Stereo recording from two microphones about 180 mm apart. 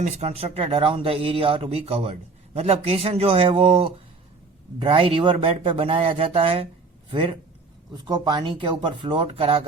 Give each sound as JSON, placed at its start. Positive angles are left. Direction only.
{"t": 0.0, "sound": "speech", "side_deg": -35}